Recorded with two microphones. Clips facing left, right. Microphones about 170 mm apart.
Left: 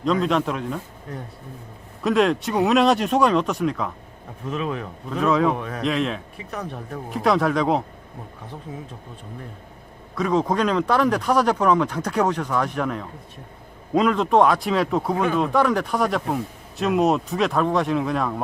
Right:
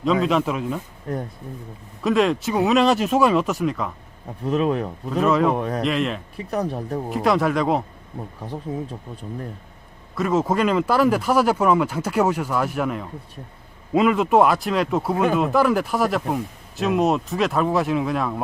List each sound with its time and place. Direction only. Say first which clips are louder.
0.0 s speech: right 1 dB; centre (ahead or behind)
2.0 s speech: even; centre (ahead or behind)
4.4 s speech: right 6 dB; 40° right (ahead or behind)
5.1 s speech: right 1 dB; centre (ahead or behind)
5.5 s speech: right 6 dB; 35° right (ahead or behind)
5.8 s speech: right 1 dB; centre (ahead or behind)
6.3 s speech: right 7 dB; 35° right (ahead or behind)
7.1 s speech: even; centre (ahead or behind)
10.2 s speech: right 1 dB; 5° right (ahead or behind)